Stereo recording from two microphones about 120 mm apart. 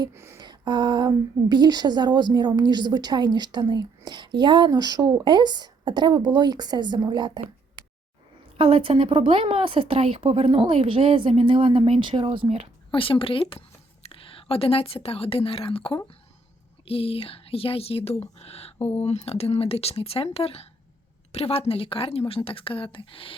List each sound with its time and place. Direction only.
0.1 s a sound: 20° right (ahead or behind)
0.4 s a woman's voice: 40° right (ahead or behind)
8.5 s a woman's voice: 50° right (ahead or behind)
12.9 s a woman's voice: 50° left (ahead or behind)